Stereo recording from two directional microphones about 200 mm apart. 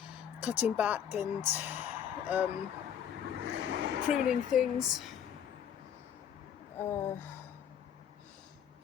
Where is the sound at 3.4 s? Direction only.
60° right (ahead or behind).